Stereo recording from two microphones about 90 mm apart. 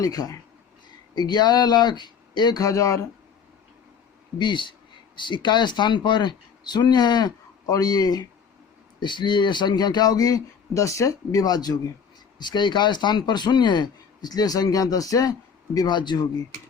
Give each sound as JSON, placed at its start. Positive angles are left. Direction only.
{"t": 0.0, "sound": "speech", "side_deg": 40}
{"t": 4.4, "sound": "speech", "side_deg": 60}
{"t": 9.0, "sound": "speech", "side_deg": 60}